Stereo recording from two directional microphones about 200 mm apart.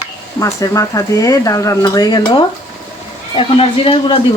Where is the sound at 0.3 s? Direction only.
15° left (ahead or behind).